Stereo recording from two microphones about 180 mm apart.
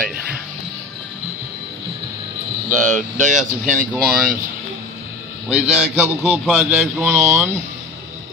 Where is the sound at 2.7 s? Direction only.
45° right (ahead or behind).